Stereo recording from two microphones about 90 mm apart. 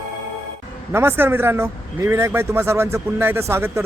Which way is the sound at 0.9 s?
25° right (ahead or behind).